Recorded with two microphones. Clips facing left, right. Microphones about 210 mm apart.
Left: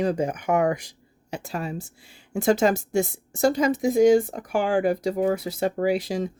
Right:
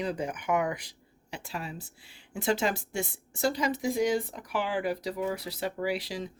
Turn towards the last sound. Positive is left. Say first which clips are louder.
# left 8 dB
turn(degrees=45)  # may be behind; listen again after turning